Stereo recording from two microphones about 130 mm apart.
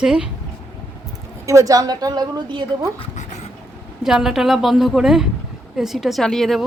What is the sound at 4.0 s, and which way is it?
A woman's voice, 5° right (ahead or behind).